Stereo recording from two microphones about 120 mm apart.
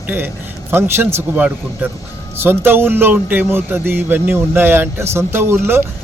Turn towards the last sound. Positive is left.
turn(degrees=-20)  # may be behind; listen again after turning